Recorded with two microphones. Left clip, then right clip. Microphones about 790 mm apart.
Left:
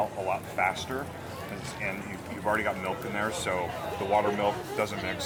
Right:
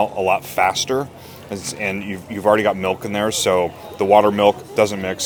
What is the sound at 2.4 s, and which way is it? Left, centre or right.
Speech, right.